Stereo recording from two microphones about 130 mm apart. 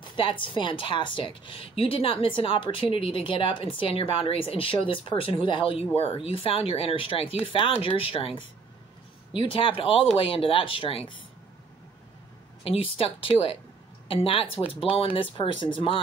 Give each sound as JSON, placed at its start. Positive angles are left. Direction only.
{"t": 0.0, "sound": "a woman's voice", "side_deg": 40}
{"t": 9.3, "sound": "a woman's voice", "side_deg": 40}
{"t": 12.9, "sound": "a woman's voice", "side_deg": 45}